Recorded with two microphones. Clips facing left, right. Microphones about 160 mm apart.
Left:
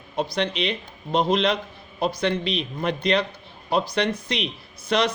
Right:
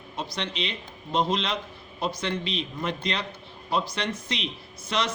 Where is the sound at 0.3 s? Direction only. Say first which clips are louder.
Left 6 dB; 60° left (ahead or behind).